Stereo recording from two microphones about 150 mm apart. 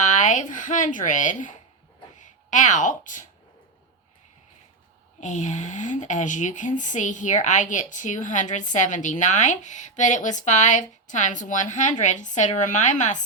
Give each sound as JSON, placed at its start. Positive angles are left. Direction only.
{"t": 0.0, "sound": "a woman's voice", "side_deg": 55}
{"t": 5.2, "sound": "speech", "side_deg": 55}